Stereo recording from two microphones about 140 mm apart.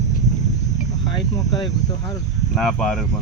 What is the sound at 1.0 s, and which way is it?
Speech, 25° left (ahead or behind).